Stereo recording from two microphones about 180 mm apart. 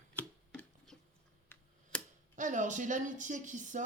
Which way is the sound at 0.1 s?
5° left (ahead or behind).